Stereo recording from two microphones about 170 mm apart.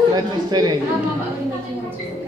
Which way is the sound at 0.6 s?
20° right (ahead or behind).